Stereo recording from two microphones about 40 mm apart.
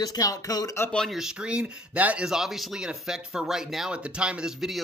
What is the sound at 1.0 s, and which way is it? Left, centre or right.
Speech, centre.